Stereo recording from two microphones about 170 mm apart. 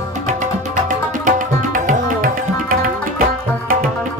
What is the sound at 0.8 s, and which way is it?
Tabla, 50° right (ahead or behind).